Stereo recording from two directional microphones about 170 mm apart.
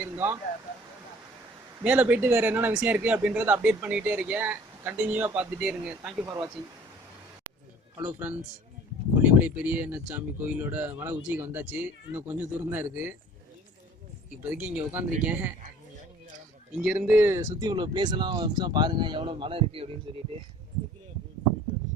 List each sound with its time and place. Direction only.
0.0 s a sound: 10° right (ahead or behind)
1.8 s speech: 10° right (ahead or behind)
6.2 s speech: 20° right (ahead or behind)
7.9 s speech: 10° right (ahead or behind)
14.4 s speech: 10° right (ahead or behind)
16.7 s speech: 5° right (ahead or behind); by 20.0 s 35° right (ahead or behind)